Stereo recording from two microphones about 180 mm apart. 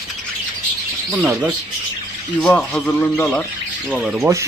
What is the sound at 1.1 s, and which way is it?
Speech, 5° right (ahead or behind).